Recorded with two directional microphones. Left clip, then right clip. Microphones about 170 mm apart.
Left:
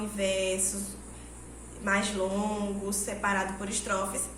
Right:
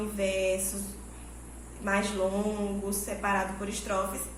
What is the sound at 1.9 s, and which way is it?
A woman's voice, 25° left (ahead or behind).